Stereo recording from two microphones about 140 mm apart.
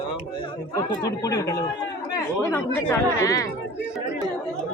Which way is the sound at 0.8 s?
25° left (ahead or behind).